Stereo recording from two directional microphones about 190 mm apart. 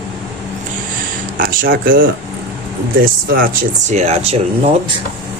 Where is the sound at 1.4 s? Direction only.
50° right (ahead or behind).